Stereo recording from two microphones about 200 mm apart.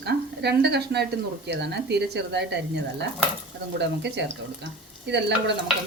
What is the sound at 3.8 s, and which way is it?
Speech, 60° right (ahead or behind).